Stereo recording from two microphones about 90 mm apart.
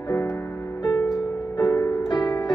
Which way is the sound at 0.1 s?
30° left (ahead or behind).